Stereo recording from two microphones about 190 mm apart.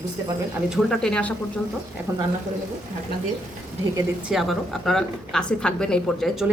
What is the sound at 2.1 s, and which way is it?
Speech, 15° right (ahead or behind).